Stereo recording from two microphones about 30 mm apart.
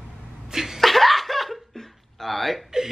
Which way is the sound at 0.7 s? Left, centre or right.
Centre.